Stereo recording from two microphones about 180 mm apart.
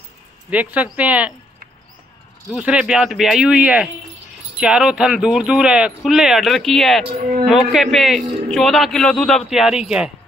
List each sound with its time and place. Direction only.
0.5 s speech: 10° right (ahead or behind)
2.5 s a man's voice: 5° right (ahead or behind)
7.1 s speech: 30° right (ahead or behind)
7.4 s a man's voice: centre (ahead or behind)